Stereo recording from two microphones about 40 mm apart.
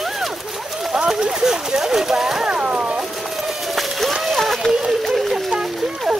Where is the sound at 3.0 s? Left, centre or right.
Centre.